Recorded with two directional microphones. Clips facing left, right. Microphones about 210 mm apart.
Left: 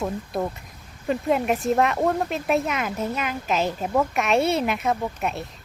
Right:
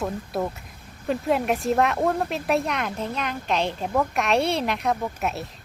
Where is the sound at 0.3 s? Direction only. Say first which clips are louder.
Even; centre (ahead or behind).